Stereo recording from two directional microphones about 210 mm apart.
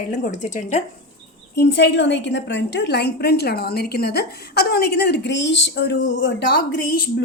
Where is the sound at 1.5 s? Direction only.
55° left (ahead or behind).